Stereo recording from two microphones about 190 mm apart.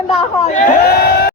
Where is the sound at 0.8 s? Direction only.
55° left (ahead or behind).